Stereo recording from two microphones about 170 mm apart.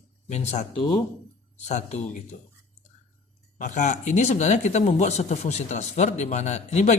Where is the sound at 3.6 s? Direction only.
45° left (ahead or behind).